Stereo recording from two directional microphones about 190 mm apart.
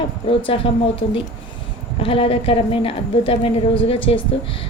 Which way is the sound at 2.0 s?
30° left (ahead or behind).